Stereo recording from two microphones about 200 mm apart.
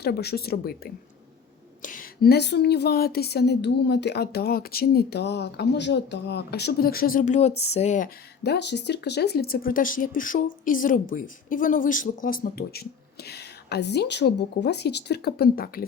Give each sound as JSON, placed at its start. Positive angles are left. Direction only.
{"t": 0.0, "sound": "speech", "side_deg": 55}
{"t": 1.8, "sound": "speech", "side_deg": 45}
{"t": 8.4, "sound": "speech", "side_deg": 60}